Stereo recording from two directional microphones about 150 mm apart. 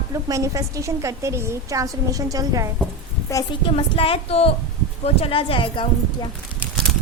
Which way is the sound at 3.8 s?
40° left (ahead or behind).